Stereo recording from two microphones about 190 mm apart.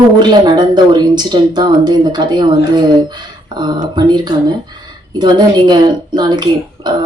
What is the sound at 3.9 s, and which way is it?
Speech, 20° right (ahead or behind).